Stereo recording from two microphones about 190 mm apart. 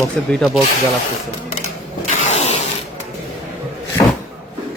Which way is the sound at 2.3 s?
35° left (ahead or behind).